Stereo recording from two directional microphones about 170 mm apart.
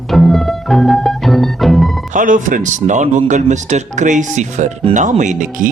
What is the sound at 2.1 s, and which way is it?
A man's voice, 50° right (ahead or behind).